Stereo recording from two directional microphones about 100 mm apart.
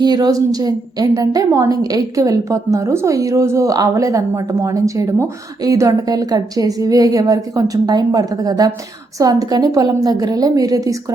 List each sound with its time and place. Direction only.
0.0 s a woman's voice: 40° right (ahead or behind)